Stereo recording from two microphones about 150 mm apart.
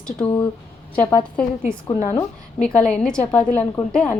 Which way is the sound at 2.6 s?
5° left (ahead or behind).